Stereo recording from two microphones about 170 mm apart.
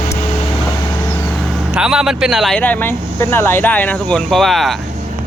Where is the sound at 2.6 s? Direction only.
10° left (ahead or behind).